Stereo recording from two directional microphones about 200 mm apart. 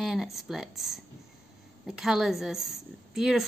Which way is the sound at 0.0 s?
Centre (ahead or behind).